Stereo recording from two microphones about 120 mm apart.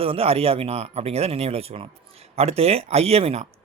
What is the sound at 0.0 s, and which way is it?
A man's voice, 50° right (ahead or behind).